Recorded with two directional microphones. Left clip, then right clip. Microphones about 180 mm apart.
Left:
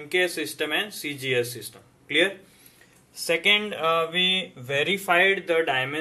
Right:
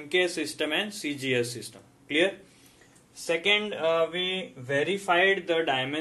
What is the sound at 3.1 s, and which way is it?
Speech, 15° left (ahead or behind).